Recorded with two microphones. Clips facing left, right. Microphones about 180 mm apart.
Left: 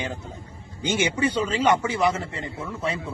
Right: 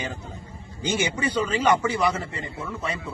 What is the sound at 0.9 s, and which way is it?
Speech, 25° left (ahead or behind).